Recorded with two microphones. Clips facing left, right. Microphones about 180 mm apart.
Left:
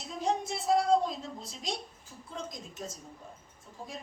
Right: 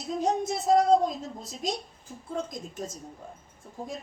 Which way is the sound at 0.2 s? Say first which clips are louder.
Right 3 dB; 40° right (ahead or behind).